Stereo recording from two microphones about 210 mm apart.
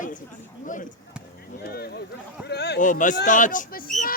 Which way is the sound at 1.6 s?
45° left (ahead or behind).